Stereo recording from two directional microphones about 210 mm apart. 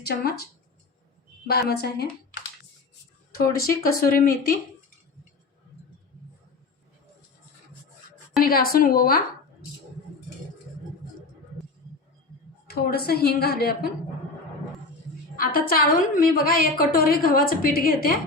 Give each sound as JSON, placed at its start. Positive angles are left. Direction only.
{"t": 0.0, "sound": "a woman's voice", "side_deg": 50}
{"t": 1.5, "sound": "a woman's voice", "side_deg": 50}
{"t": 3.3, "sound": "a woman's voice", "side_deg": 45}
{"t": 8.4, "sound": "a woman's voice", "side_deg": 45}
{"t": 12.6, "sound": "a woman's voice", "side_deg": 45}
{"t": 15.4, "sound": "a woman's voice", "side_deg": 45}